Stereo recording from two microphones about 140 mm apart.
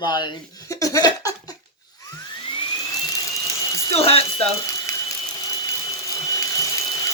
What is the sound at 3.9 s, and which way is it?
Speech, 45° left (ahead or behind).